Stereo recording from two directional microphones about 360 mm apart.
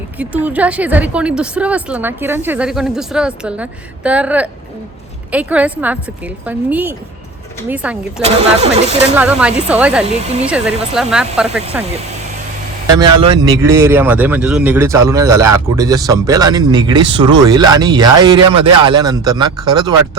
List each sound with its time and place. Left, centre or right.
0.2 s a woman's voice: centre
8.2 s speech: centre
9.1 s a woman's voice: centre
10.1 s speech: centre
10.4 s a woman's voice: centre
13.2 s speech: centre